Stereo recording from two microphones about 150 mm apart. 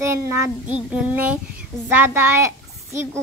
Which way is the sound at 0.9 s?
10° right (ahead or behind).